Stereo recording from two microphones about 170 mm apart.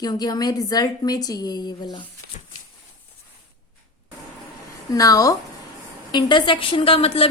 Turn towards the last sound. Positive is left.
turn(degrees=35)  # may be behind; listen again after turning